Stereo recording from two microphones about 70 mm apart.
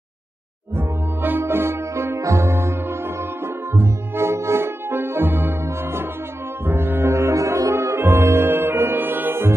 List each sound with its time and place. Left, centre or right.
0.7 s music: right
6.6 s brass instrument: right
8.0 s music: right